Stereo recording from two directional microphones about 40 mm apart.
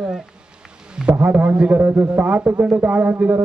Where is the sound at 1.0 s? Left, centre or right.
Right.